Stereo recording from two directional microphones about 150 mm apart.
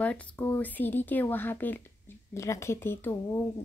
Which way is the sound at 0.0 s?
10° left (ahead or behind).